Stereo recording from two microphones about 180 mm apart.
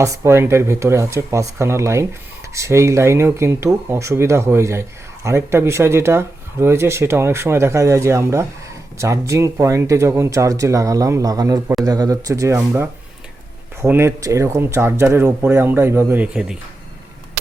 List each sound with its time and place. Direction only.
0.0 s speech: 15° right (ahead or behind)